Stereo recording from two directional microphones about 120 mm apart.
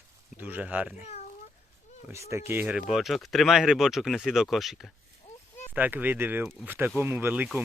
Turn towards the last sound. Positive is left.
turn(degrees=-15)  # may be behind; listen again after turning